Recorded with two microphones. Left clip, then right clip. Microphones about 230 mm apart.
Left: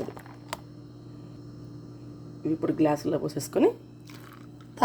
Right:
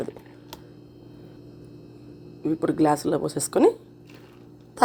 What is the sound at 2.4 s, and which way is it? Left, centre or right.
A woman's voice, right.